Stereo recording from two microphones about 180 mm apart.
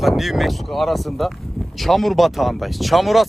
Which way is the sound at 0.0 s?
Centre (ahead or behind).